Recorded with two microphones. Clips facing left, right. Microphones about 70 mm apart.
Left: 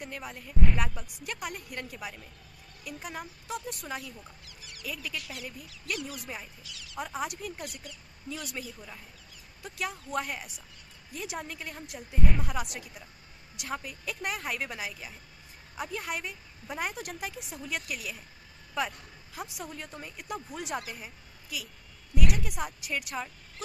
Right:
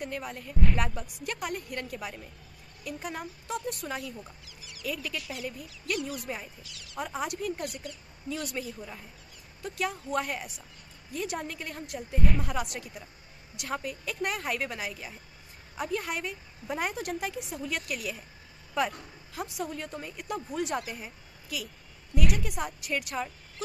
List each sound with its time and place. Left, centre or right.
0.0 s a woman's voice: centre
4.5 s music: left
4.8 s a woman's voice: centre